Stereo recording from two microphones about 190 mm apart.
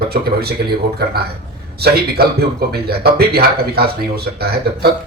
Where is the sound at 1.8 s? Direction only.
55° right (ahead or behind).